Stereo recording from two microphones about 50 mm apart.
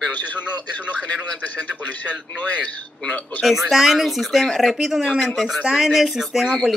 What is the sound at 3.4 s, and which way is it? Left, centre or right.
A woman's voice, centre.